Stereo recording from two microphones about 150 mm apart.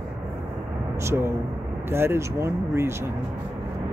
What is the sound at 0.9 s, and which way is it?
Speech, 20° right (ahead or behind).